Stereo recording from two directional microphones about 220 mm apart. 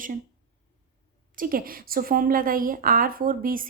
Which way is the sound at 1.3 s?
40° right (ahead or behind).